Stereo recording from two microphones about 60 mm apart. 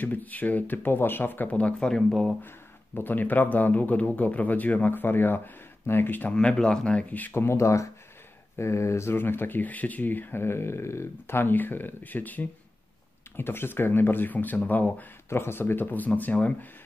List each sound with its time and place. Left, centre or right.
0.0 s speech: left
1.5 s speech: left
1.8 s speech: centre
3.0 s speech: left
6.3 s speech: centre
7.3 s speech: left
13.4 s speech: left
15.2 s speech: left